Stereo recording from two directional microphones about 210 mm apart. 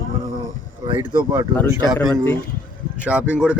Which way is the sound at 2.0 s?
20° left (ahead or behind).